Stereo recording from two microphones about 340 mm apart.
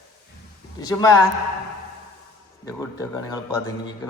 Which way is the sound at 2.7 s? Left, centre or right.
Centre.